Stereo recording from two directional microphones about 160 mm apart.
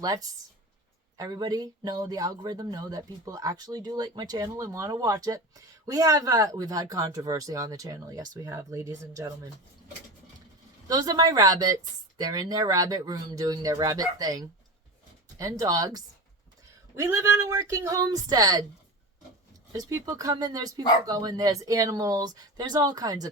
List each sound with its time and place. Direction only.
0.0 s speech: 25° right (ahead or behind)
10.8 s speech: 25° right (ahead or behind)
17.5 s speech: 20° right (ahead or behind)
19.7 s speech: 20° right (ahead or behind)